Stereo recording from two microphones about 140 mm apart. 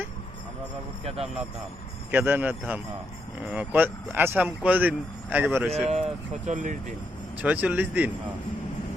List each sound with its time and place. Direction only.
1.0 s speech: 45° right (ahead or behind)
2.0 s speech: 10° right (ahead or behind)
5.9 s speech: 55° right (ahead or behind)
7.4 s speech: 10° right (ahead or behind)